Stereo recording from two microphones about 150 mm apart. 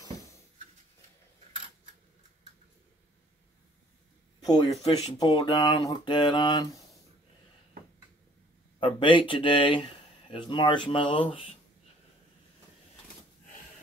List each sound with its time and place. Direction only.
4.6 s speech: 40° left (ahead or behind)
5.3 s a sound: 30° left (ahead or behind)
8.7 s speech: 35° left (ahead or behind)